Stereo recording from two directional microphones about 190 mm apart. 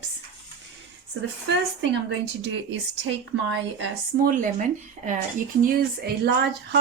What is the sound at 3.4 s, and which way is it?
Speech, 85° right.